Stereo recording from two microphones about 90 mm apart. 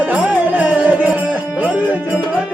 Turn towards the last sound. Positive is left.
turn(degrees=-15)  # may be behind; listen again after turning